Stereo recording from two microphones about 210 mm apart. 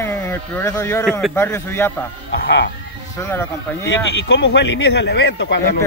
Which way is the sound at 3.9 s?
55° left (ahead or behind).